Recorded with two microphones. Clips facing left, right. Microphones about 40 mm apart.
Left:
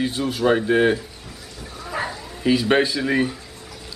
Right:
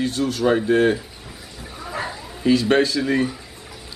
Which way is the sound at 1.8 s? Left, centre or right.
Centre.